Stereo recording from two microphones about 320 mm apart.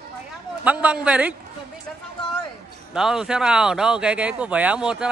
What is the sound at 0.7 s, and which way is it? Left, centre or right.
Speech, centre.